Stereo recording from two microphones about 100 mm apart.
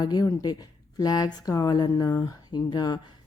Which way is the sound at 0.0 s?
40° left (ahead or behind).